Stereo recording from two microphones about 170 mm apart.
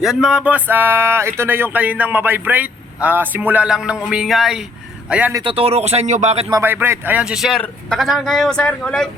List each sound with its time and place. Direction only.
0.0 s a man's voice: 5° right (ahead or behind)
5.3 s speech: 30° right (ahead or behind)
6.5 s a man's voice: 15° right (ahead or behind); by 9.0 s 5° left (ahead or behind)